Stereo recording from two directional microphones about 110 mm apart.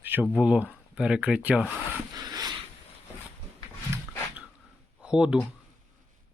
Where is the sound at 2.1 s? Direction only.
35° right (ahead or behind).